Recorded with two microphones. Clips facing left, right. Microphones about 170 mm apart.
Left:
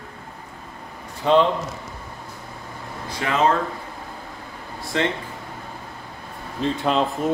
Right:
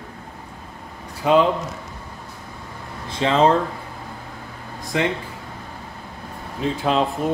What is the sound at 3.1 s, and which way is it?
Speech, 25° right (ahead or behind).